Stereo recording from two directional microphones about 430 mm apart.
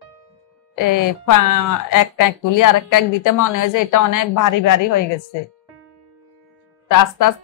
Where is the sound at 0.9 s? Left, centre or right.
Left.